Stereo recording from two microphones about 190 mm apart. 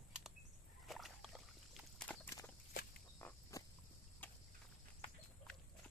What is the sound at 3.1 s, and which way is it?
Frog, 10° left (ahead or behind).